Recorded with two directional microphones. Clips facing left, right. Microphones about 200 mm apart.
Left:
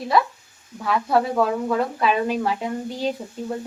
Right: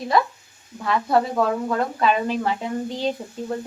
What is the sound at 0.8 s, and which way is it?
Speech, centre (ahead or behind).